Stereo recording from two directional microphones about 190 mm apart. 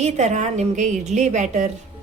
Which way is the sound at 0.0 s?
35° right (ahead or behind).